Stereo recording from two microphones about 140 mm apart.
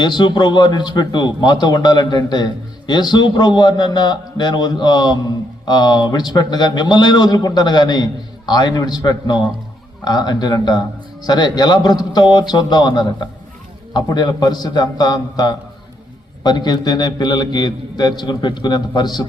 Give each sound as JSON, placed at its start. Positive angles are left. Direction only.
{"t": 0.0, "sound": "a man's voice", "side_deg": 30}